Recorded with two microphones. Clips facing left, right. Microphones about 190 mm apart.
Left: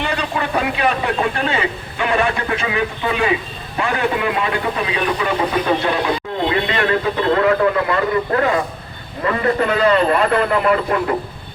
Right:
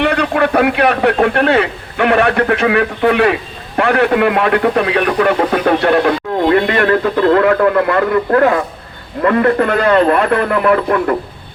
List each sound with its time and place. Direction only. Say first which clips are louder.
0.0 s a man's voice: right 8 dB; 65° right (ahead or behind)